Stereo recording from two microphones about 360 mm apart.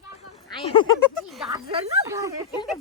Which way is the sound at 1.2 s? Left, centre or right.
Centre.